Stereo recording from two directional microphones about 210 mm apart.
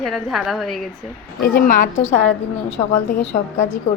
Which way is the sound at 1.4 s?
45° left (ahead or behind).